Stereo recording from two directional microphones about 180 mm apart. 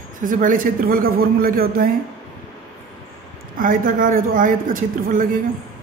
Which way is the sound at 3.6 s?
50° right (ahead or behind).